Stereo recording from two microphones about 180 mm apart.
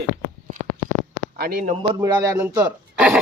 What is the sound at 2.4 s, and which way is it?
Speech, 10° right (ahead or behind).